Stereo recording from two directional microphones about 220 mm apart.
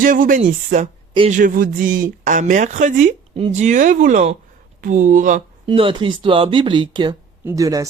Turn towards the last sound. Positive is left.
turn(degrees=-15)  # may be behind; listen again after turning